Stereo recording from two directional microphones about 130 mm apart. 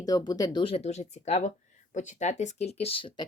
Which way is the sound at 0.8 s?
60° left (ahead or behind).